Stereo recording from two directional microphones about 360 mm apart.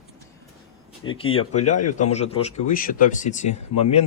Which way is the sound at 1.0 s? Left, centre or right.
Left.